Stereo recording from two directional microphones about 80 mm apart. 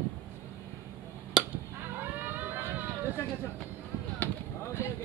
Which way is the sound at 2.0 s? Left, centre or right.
Right.